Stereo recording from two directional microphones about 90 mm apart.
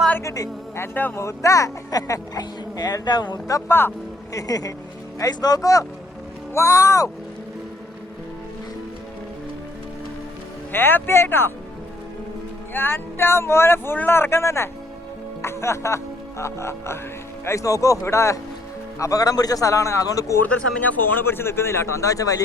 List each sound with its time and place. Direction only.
0.2 s a man's voice: 35° left (ahead or behind)
0.8 s speech: 25° left (ahead or behind)
1.2 s speech: 35° left (ahead or behind); by 3.4 s 50° left (ahead or behind)
3.7 s speech: 25° left (ahead or behind)
4.4 s a man's voice: 40° left (ahead or behind)
10.7 s speech: 25° left (ahead or behind)
12.7 s a man's voice: 25° left (ahead or behind)
20.4 s speech: 20° left (ahead or behind); by 22.4 s 40° left (ahead or behind)